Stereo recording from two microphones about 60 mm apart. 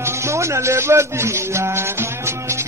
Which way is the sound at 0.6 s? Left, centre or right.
Right.